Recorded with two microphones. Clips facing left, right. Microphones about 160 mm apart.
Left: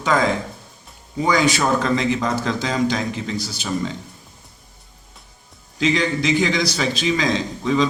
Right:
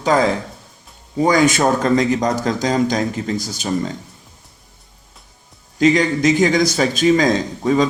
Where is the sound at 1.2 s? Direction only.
45° right (ahead or behind).